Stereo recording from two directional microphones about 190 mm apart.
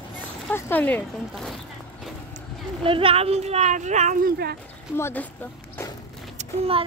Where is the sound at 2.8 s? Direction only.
30° right (ahead or behind).